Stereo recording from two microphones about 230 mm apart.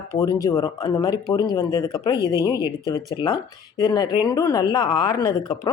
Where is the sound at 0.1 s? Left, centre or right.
Centre.